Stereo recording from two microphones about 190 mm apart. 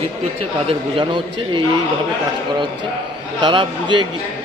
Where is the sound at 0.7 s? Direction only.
25° right (ahead or behind).